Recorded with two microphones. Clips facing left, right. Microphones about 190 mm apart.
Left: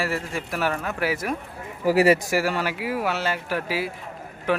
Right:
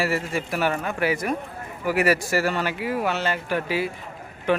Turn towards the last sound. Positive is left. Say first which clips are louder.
# right 1 dB
turn(degrees=5)  # may be behind; listen again after turning